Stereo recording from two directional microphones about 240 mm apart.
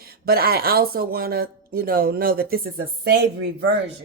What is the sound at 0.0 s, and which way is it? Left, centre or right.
Speech, right.